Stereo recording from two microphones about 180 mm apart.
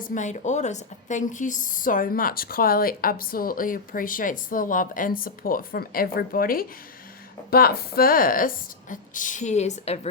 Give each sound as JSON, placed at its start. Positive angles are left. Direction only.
{"t": 0.0, "sound": "a woman's voice", "side_deg": 45}